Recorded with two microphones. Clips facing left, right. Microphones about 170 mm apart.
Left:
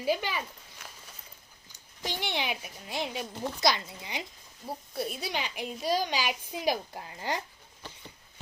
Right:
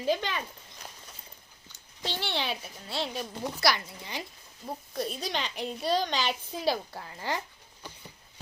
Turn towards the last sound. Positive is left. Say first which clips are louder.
# even
turn(degrees=15)  # may be behind; listen again after turning